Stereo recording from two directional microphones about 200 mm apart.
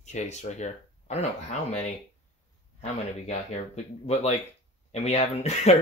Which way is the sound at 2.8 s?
35° left (ahead or behind).